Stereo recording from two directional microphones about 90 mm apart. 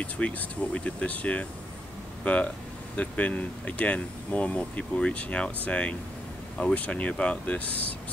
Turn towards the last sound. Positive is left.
turn(degrees=15)  # may be behind; listen again after turning